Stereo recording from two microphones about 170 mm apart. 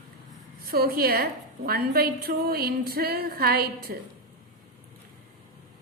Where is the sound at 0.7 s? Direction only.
60° right (ahead or behind).